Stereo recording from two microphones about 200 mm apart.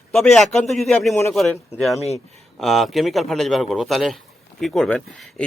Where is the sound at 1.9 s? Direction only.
30° left (ahead or behind).